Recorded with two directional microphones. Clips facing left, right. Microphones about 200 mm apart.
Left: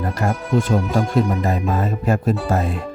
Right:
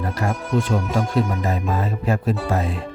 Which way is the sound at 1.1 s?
45° left (ahead or behind).